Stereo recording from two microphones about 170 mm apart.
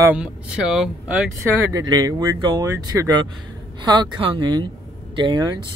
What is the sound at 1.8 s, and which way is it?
Speech, 25° right (ahead or behind).